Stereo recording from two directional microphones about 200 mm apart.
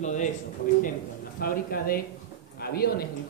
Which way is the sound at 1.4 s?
50° left (ahead or behind).